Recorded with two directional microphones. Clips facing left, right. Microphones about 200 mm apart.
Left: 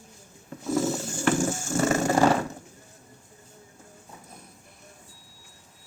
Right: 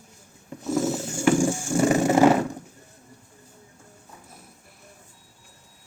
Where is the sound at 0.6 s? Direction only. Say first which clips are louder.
Right 1 dB; centre (ahead or behind); by 2.4 s 15° right (ahead or behind).